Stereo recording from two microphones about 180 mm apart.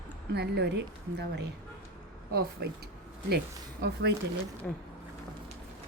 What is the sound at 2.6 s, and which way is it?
Speech, 60° right (ahead or behind).